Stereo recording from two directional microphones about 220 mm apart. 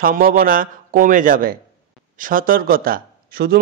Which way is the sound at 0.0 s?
40° right (ahead or behind).